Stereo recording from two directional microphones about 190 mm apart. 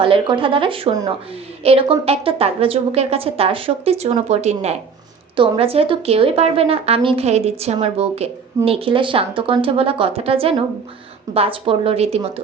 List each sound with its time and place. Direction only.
0.0 s a woman's voice: 25° right (ahead or behind)